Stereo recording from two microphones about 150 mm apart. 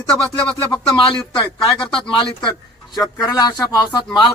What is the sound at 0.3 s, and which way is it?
Speech, 35° left (ahead or behind).